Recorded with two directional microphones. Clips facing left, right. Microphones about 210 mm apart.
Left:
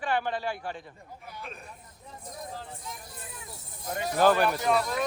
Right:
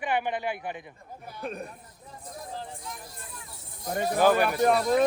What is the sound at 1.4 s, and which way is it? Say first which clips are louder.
Speech: right 10 dB; 45° right (ahead or behind).